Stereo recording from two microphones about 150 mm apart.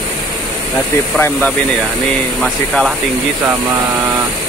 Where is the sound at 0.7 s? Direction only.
15° left (ahead or behind).